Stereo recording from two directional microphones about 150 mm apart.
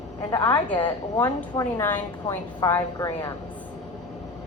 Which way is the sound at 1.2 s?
20° left (ahead or behind).